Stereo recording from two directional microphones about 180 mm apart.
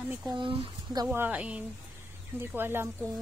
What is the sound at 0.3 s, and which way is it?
Speech, 25° right (ahead or behind).